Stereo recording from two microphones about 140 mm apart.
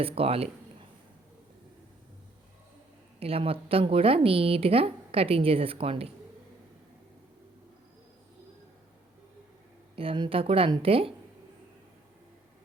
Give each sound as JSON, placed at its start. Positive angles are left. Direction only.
{"t": 0.0, "sound": "speech", "side_deg": -45}
{"t": 3.2, "sound": "speech", "side_deg": -45}
{"t": 9.9, "sound": "speech", "side_deg": -40}